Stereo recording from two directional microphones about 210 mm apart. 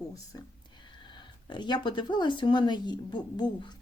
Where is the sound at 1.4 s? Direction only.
20° left (ahead or behind).